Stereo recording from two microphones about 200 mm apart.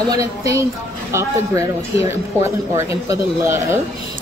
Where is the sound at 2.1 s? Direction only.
15° right (ahead or behind).